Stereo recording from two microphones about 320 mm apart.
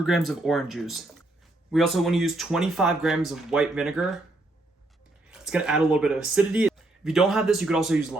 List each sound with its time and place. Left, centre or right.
0.0 s speech: centre
5.3 s speech: centre